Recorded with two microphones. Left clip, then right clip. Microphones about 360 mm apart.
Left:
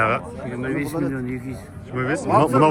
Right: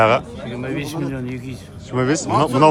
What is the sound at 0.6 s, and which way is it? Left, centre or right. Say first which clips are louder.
Speech: left 1 dB; right.